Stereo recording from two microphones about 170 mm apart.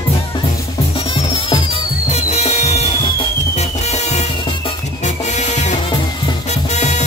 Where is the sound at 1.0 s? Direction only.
30° left (ahead or behind).